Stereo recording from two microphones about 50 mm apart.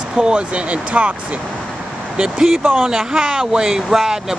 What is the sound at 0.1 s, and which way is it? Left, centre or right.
Speech, centre.